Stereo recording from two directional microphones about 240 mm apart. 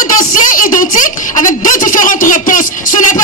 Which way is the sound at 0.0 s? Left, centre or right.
Left.